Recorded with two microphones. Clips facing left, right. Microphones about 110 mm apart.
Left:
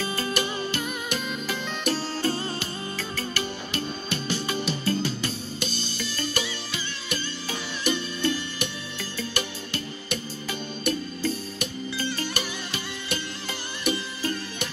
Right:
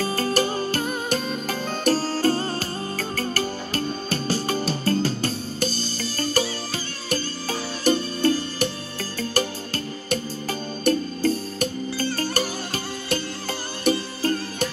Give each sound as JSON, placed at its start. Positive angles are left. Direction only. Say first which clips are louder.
{"t": 0.0, "sound": "music", "louder": "right 5 dB", "side_deg": -40}
{"t": 10.8, "sound": "music", "louder": "right 7 dB", "side_deg": -40}